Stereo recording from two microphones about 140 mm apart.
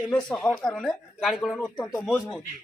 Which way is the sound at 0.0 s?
5° left (ahead or behind).